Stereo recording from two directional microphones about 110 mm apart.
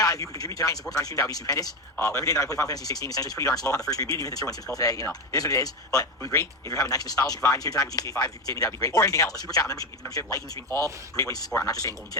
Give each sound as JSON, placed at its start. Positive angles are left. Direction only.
{"t": 0.0, "sound": "speech", "side_deg": 30}